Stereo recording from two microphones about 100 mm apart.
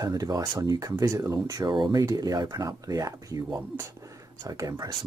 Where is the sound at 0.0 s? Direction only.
35° right (ahead or behind).